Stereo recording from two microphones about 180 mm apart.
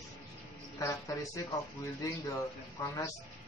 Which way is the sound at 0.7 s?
15° left (ahead or behind).